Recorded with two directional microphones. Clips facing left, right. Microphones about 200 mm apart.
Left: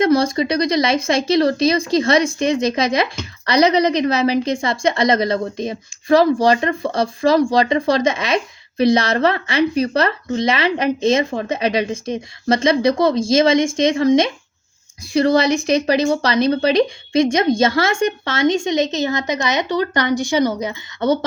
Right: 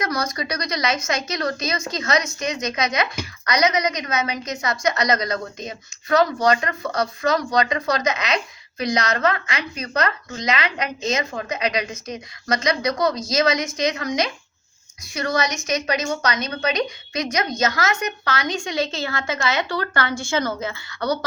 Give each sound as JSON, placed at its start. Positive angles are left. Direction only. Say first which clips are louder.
{"t": 0.0, "sound": "speech", "louder": "left 10 dB", "side_deg": 30}